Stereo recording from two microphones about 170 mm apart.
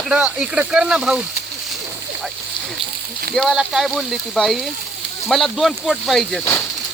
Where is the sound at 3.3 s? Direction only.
Centre (ahead or behind).